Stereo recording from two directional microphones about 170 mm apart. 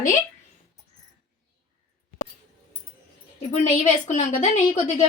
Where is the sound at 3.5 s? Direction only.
45° left (ahead or behind).